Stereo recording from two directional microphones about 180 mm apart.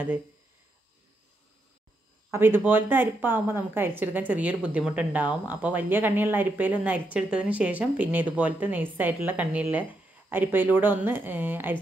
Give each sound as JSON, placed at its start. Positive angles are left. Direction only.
{"t": 2.3, "sound": "a woman's voice", "side_deg": -15}